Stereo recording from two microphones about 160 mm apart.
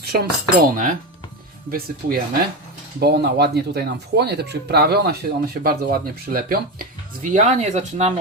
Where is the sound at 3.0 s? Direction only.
85° right.